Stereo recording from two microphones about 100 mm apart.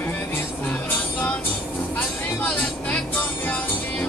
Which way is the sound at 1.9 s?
15° left (ahead or behind).